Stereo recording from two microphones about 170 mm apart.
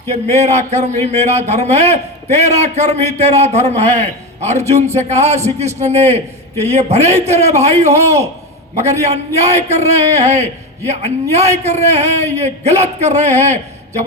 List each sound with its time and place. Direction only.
0.1 s a man's voice: 40° right (ahead or behind)